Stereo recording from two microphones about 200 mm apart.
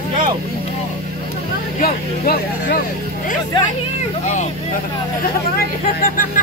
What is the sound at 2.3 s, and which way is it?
Speech, 50° left (ahead or behind).